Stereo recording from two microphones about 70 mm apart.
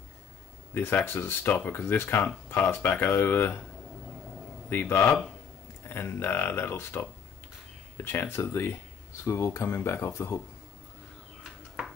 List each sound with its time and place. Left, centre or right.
0.7 s speech: left
4.6 s speech: left